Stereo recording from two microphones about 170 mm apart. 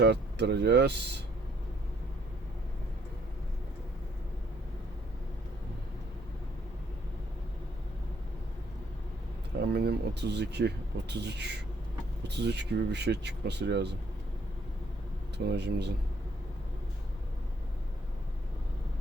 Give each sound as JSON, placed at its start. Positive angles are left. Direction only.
{"t": 0.0, "sound": "speech", "side_deg": -80}
{"t": 9.7, "sound": "speech", "side_deg": -75}
{"t": 15.4, "sound": "speech", "side_deg": -80}